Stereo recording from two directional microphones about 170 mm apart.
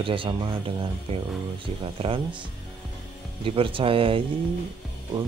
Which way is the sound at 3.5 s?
30° right (ahead or behind).